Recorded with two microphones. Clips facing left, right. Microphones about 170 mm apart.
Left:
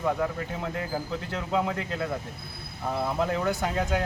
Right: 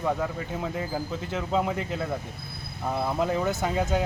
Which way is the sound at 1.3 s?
20° right (ahead or behind).